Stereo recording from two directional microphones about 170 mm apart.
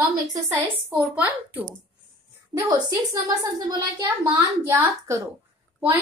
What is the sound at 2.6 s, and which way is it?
A woman's voice, 25° right (ahead or behind).